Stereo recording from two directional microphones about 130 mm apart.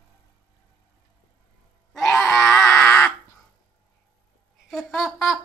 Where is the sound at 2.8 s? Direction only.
20° left (ahead or behind).